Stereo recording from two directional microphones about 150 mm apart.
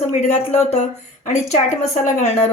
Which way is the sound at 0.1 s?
50° left (ahead or behind).